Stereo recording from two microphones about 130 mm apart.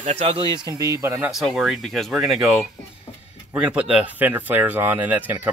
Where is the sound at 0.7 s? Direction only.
30° right (ahead or behind).